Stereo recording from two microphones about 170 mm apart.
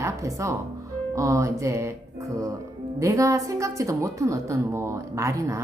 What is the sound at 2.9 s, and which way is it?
A woman's voice, 20° right (ahead or behind).